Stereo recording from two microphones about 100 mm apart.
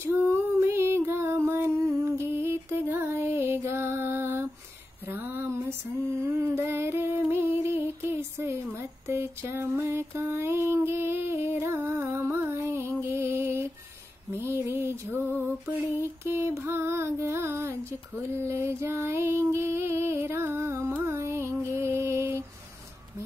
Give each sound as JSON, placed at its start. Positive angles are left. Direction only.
{"t": 0.0, "sound": "music", "side_deg": -20}
{"t": 5.0, "sound": "a sound", "side_deg": -20}
{"t": 13.1, "sound": "music", "side_deg": -25}
{"t": 18.3, "sound": "female singing", "side_deg": -25}